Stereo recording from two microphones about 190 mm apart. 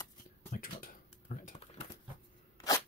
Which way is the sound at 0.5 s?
45° left (ahead or behind).